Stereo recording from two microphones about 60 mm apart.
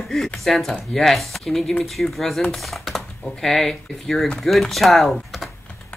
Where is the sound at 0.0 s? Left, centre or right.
Centre.